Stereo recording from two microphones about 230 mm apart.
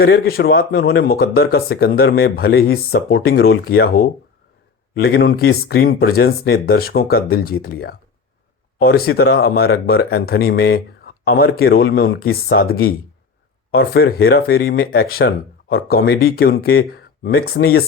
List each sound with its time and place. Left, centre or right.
0.0 s speech: left